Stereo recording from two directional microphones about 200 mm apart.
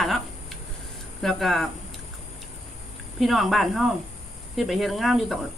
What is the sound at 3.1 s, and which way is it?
Speech, centre (ahead or behind).